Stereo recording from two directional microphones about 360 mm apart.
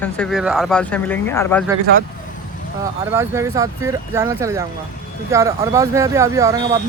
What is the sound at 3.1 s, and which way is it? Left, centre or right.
Speech, centre.